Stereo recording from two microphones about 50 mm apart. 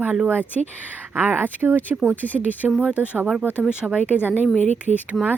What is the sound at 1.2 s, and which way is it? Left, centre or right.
Speech, right.